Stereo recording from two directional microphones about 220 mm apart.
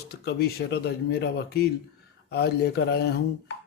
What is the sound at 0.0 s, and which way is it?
Speech, 45° left (ahead or behind).